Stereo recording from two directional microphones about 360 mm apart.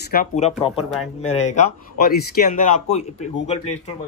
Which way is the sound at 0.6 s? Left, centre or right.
Centre.